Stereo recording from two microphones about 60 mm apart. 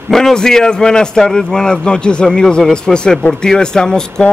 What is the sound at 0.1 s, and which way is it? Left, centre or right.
A man's voice, centre.